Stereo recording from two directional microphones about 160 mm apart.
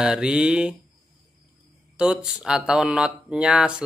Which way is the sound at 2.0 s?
5° right (ahead or behind).